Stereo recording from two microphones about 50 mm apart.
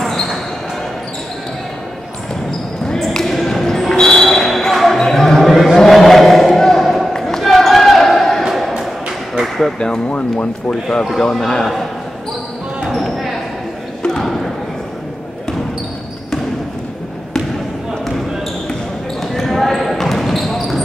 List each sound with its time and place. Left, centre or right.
0.0 s basketball bounce: centre
2.9 s basketball bounce: centre
7.2 s a sound: centre
9.8 s speech: centre
12.8 s basketball bounce: centre
14.2 s a sound: centre
19.3 s basketball bounce: centre